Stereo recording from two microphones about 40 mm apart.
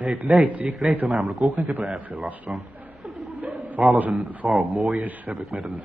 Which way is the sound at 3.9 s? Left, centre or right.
Right.